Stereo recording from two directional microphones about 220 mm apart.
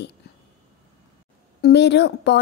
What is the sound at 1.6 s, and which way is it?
Speech, 50° left (ahead or behind).